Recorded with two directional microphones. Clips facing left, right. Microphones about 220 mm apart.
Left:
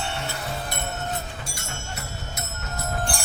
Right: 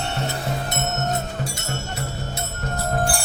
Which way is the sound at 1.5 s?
30° right (ahead or behind).